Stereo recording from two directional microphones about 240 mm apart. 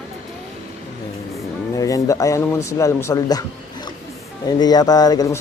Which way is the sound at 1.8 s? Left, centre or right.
Centre.